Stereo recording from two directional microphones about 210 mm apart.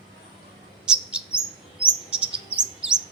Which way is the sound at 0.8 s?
5° right (ahead or behind).